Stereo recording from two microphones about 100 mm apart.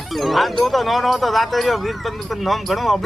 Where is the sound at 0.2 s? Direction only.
Centre (ahead or behind).